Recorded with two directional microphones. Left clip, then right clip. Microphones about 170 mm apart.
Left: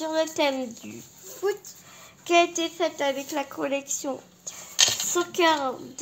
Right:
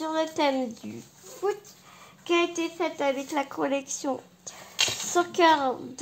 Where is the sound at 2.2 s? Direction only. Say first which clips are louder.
Left 4 dB; 25° right (ahead or behind).